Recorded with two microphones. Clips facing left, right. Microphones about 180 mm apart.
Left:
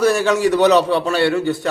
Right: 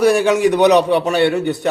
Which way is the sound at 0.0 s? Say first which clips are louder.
Right 2 dB; 15° right (ahead or behind).